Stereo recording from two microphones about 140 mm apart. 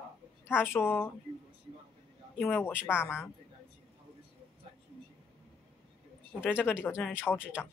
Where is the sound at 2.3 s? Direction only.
10° left (ahead or behind).